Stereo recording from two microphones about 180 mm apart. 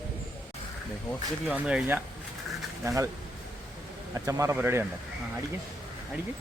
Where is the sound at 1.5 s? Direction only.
5° right (ahead or behind).